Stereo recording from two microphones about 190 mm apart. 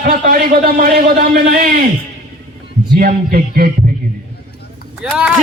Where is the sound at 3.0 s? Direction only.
50° right (ahead or behind).